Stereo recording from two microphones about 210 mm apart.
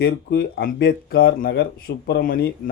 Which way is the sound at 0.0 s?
50° left (ahead or behind).